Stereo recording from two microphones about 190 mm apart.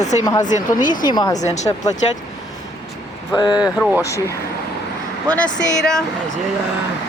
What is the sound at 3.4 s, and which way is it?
Speech, 20° left (ahead or behind).